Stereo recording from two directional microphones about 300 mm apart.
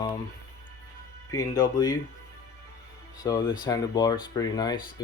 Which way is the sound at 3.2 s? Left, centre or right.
Centre.